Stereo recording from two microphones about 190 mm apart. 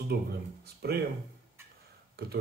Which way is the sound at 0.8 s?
55° right (ahead or behind).